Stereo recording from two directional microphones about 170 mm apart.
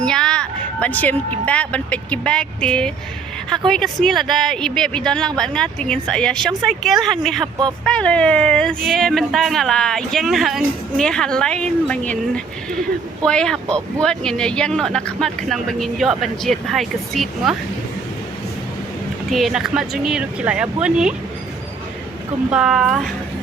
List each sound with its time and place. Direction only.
0.0 s speech: 5° left (ahead or behind)
19.3 s speech: centre (ahead or behind)
22.4 s speech: 5° right (ahead or behind)